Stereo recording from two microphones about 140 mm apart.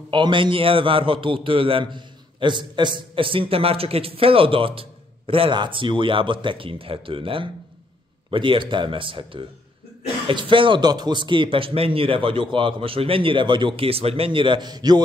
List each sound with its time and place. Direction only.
0.1 s a man's voice: 35° right (ahead or behind)